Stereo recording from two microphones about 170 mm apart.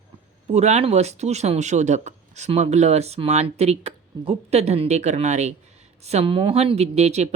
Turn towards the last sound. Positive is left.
turn(degrees=-40)  # may be behind; listen again after turning